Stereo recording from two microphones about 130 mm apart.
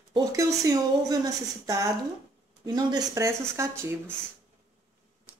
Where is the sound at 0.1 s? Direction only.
25° right (ahead or behind).